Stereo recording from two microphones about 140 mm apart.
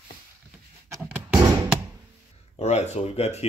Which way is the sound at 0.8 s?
20° right (ahead or behind).